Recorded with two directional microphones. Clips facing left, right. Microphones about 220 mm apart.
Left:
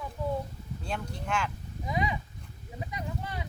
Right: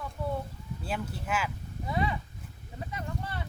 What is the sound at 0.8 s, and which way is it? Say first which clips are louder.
Speech: right 1 dB; 5° right (ahead or behind).